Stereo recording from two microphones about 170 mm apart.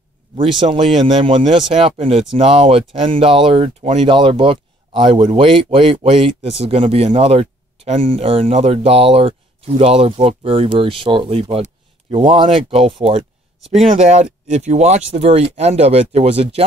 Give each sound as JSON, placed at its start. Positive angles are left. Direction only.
{"t": 0.7, "sound": "speech", "side_deg": -40}
{"t": 1.0, "sound": "speech", "side_deg": -30}